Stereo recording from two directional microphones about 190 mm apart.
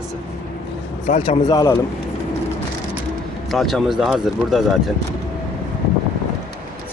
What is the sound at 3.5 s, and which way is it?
Speech, centre (ahead or behind).